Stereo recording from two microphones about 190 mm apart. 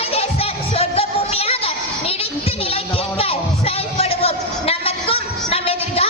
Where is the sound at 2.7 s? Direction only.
30° left (ahead or behind).